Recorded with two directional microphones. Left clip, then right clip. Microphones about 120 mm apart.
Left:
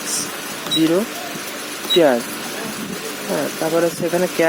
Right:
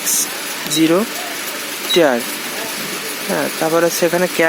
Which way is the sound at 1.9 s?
10° right (ahead or behind).